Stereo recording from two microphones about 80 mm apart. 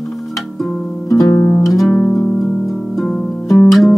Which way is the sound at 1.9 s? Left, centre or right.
Centre.